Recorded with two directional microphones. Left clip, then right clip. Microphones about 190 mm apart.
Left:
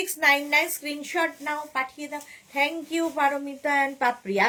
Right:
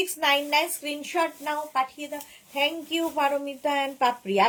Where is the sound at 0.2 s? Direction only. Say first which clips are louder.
Left 3 dB; 20° left (ahead or behind).